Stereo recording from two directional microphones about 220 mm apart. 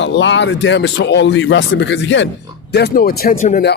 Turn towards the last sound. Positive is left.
turn(degrees=35)  # may be behind; listen again after turning